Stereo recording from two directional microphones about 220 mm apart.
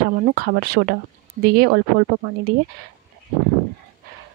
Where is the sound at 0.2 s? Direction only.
40° right (ahead or behind).